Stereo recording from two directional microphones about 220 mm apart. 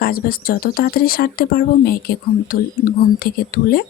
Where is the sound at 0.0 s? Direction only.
40° left (ahead or behind).